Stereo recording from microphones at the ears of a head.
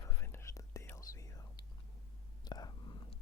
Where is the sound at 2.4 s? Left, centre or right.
Left.